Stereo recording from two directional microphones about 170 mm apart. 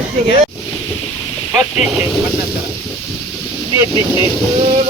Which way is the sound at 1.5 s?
5° right (ahead or behind).